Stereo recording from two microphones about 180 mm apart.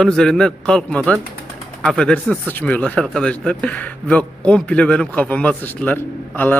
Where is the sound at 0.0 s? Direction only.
5° left (ahead or behind).